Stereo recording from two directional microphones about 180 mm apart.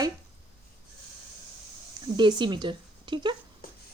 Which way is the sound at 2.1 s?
25° right (ahead or behind).